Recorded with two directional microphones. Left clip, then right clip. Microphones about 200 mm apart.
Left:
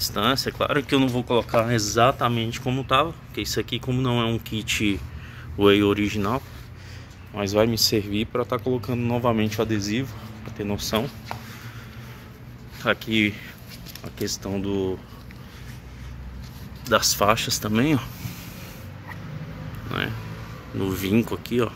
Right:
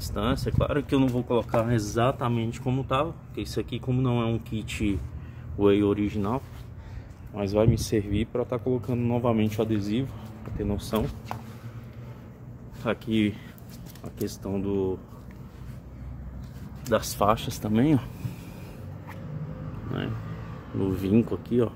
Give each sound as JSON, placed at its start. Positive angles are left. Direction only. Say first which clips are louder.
{"t": 0.0, "sound": "speech", "louder": "left 7 dB", "side_deg": 5}
{"t": 12.8, "sound": "speech", "louder": "left 5 dB", "side_deg": -5}
{"t": 16.9, "sound": "speech", "louder": "left 4 dB", "side_deg": 0}
{"t": 20.8, "sound": "speech", "louder": "left 1 dB", "side_deg": -15}